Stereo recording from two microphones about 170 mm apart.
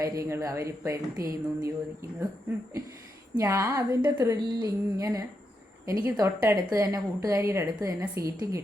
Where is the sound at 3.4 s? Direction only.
15° right (ahead or behind).